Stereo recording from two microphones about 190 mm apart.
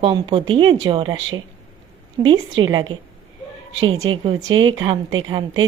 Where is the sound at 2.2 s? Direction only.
25° right (ahead or behind).